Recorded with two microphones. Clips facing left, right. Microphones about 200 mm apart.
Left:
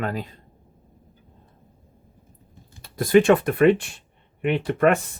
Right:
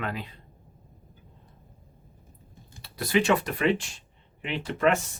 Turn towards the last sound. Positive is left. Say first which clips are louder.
# left 5 dB
turn(degrees=55)  # may be behind; listen again after turning